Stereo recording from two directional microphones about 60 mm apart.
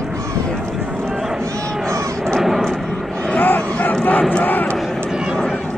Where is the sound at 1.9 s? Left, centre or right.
Right.